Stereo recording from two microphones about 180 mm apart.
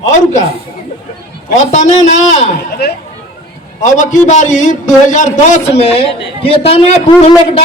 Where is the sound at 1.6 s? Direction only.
40° left (ahead or behind).